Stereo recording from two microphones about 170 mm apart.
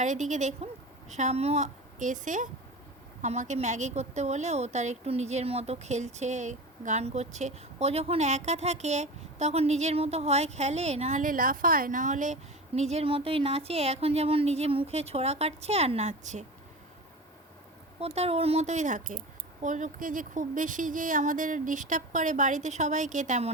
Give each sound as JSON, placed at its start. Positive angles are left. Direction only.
{"t": 0.0, "sound": "speech", "side_deg": -45}
{"t": 18.0, "sound": "speech", "side_deg": -35}